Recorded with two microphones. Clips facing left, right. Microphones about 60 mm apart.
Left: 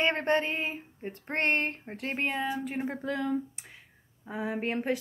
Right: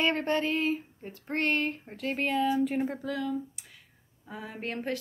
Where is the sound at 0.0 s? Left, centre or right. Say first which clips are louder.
Left 1 dB; left.